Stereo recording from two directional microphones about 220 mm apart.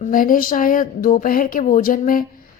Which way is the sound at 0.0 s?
40° left (ahead or behind).